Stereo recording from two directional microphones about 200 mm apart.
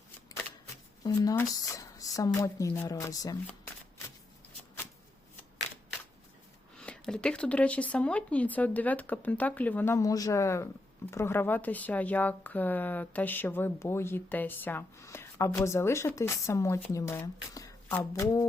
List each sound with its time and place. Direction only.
1.0 s speech: 20° left (ahead or behind)
6.7 s speech: 5° left (ahead or behind)